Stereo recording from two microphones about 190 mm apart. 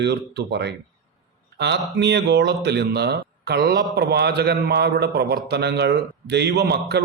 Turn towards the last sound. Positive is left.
turn(degrees=-60)  # may be behind; listen again after turning